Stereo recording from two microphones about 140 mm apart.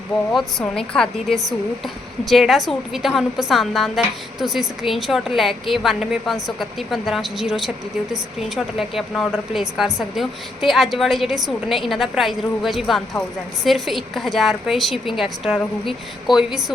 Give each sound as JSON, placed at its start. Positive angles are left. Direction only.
{"t": 0.3, "sound": "a woman's voice", "side_deg": 5}